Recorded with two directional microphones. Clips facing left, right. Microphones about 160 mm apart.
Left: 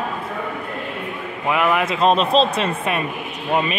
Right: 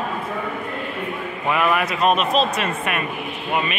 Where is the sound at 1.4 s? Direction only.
15° left (ahead or behind).